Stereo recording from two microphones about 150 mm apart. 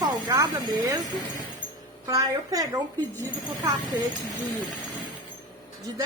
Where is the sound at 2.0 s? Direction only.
25° right (ahead or behind).